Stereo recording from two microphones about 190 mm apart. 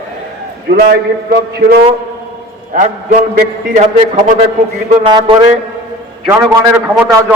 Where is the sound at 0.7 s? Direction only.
60° right (ahead or behind).